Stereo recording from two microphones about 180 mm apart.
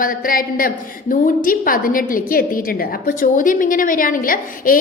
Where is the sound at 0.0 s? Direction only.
50° left (ahead or behind).